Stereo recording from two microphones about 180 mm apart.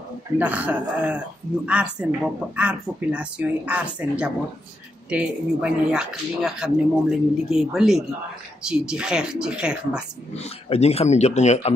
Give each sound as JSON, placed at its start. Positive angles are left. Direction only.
{"t": 0.4, "sound": "speech", "side_deg": -10}
{"t": 10.3, "sound": "speech", "side_deg": 35}